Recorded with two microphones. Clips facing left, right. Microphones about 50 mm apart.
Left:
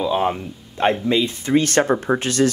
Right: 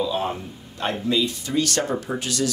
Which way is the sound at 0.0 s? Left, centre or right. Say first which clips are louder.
Left 5 dB; left.